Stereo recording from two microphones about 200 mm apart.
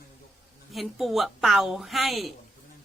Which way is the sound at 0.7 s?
Centre (ahead or behind).